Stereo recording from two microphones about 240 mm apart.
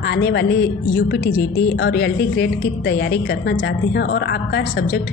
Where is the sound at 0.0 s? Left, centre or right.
Left.